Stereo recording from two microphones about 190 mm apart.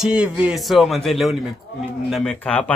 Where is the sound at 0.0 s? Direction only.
5° right (ahead or behind).